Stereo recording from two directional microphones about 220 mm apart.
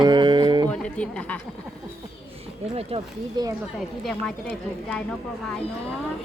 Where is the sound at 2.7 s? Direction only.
20° right (ahead or behind).